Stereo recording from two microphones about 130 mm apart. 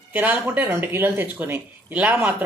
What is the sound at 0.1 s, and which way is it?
Speech, 10° right (ahead or behind).